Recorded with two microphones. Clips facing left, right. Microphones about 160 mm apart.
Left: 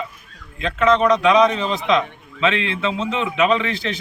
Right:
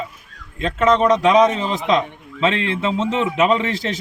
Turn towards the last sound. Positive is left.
turn(degrees=-40)  # may be behind; listen again after turning